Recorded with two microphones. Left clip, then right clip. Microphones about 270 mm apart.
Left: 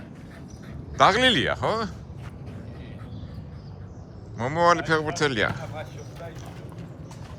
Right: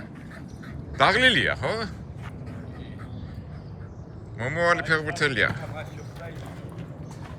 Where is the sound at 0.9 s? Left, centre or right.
Centre.